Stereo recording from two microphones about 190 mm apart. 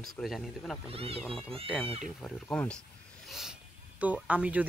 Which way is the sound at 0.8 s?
30° right (ahead or behind).